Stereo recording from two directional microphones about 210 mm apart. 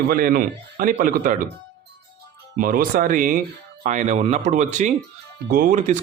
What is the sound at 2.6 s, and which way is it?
Speech, 40° right (ahead or behind).